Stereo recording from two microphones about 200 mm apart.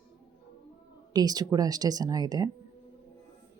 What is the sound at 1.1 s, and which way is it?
Speech, 20° right (ahead or behind).